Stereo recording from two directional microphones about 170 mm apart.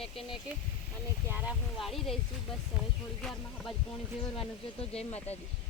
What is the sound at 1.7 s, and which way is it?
Speech, centre (ahead or behind).